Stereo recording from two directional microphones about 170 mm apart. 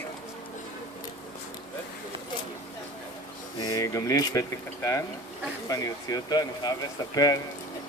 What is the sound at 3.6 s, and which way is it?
Speech, 25° left (ahead or behind).